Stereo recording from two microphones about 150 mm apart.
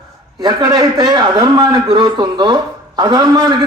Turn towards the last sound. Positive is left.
turn(degrees=-30)  # may be behind; listen again after turning